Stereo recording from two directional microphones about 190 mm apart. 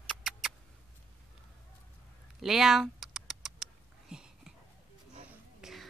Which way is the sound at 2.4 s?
Centre (ahead or behind).